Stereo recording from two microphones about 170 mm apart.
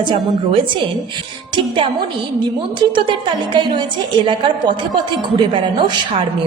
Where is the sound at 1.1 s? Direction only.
30° right (ahead or behind).